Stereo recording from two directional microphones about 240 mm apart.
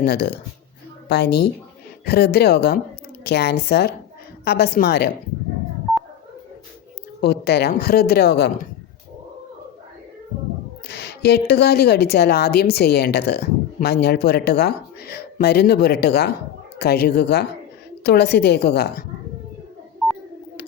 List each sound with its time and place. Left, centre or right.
0.0 s a woman's voice: left
7.2 s speech: left
10.3 s a sound: right
10.8 s a woman's voice: left